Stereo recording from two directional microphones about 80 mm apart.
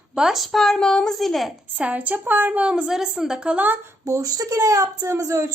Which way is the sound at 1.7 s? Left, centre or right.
Centre.